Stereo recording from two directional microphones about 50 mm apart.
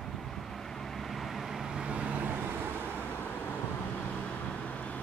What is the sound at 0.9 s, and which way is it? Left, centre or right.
Vehicle, centre.